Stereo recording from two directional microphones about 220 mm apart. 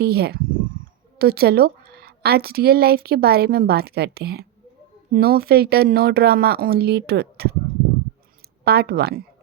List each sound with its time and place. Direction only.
0.0 s a woman's voice: 45° right (ahead or behind)
8.6 s a woman's voice: 45° right (ahead or behind)